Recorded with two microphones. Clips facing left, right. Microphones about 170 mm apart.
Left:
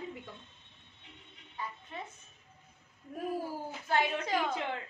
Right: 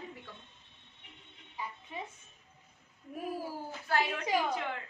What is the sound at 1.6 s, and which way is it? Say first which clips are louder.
Speech: even; 10° right (ahead or behind).